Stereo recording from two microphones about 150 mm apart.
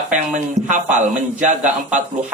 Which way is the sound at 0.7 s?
55° right (ahead or behind).